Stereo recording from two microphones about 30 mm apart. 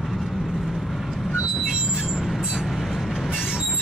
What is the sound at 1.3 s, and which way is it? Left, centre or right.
Train, centre.